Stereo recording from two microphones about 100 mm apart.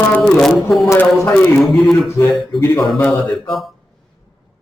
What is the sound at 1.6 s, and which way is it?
Speech, centre (ahead or behind).